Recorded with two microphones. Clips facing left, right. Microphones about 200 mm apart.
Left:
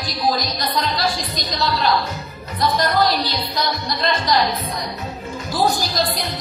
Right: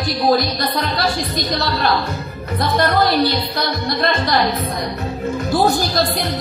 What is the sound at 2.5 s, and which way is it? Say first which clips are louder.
Speech: right 2 dB; 60° right (ahead or behind).